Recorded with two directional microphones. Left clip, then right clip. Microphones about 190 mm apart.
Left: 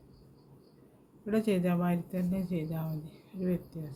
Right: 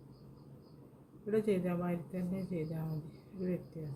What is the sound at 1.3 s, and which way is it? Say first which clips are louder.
Speech: left 3 dB; 60° left (ahead or behind).